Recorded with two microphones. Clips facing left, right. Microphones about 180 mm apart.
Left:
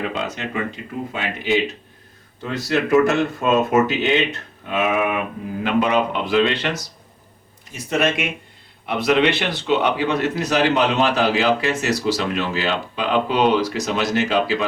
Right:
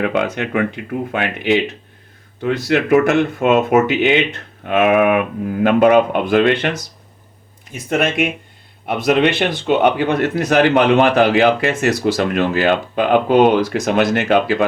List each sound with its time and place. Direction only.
0.0 s speech: 65° right (ahead or behind)
2.4 s speech: 60° right (ahead or behind)
7.9 s speech: 55° right (ahead or behind)